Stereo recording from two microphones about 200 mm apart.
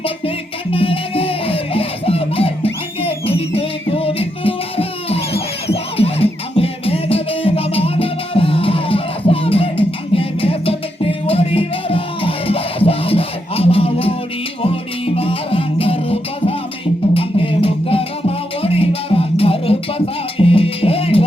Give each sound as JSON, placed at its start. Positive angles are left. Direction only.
{"t": 0.7, "sound": "music", "side_deg": 30}